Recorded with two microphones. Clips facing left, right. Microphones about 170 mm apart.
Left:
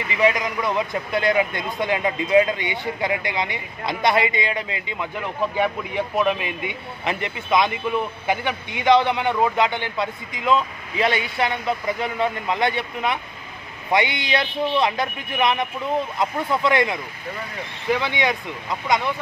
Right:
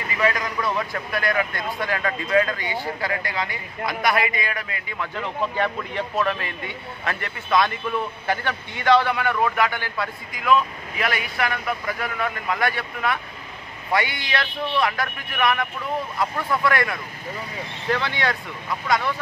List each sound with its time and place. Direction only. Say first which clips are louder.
0.1 s speech: left 3 dB; 20° left (ahead or behind)